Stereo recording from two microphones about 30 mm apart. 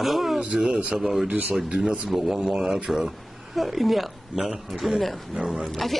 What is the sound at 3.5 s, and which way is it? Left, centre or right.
A woman's voice, centre.